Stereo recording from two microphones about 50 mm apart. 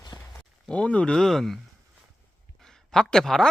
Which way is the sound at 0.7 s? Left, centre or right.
Left.